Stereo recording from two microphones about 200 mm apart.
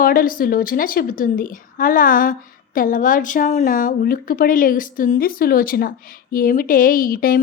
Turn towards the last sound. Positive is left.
turn(degrees=45)  # may be behind; listen again after turning